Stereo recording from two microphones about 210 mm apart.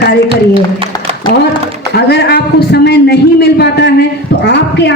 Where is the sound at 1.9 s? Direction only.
50° left (ahead or behind).